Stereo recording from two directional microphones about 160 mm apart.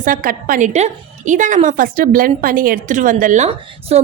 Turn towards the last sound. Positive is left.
turn(degrees=-45)  # may be behind; listen again after turning